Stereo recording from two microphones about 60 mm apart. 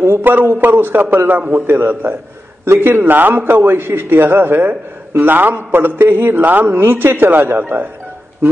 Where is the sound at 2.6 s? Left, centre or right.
Right.